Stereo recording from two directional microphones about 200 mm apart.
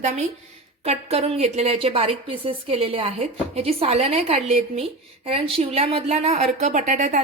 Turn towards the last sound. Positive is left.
turn(degrees=-40)  # may be behind; listen again after turning